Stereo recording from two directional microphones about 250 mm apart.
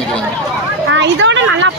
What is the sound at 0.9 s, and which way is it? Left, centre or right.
Speech, right.